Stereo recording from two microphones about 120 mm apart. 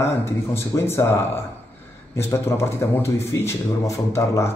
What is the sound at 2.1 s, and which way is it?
A man's voice, 20° left (ahead or behind).